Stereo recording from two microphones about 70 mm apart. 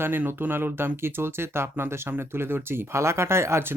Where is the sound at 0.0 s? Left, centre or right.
Right.